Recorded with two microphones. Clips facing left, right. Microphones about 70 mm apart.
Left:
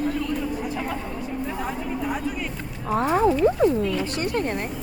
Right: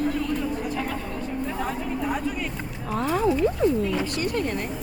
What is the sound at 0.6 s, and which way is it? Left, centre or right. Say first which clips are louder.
Speech: even; centre.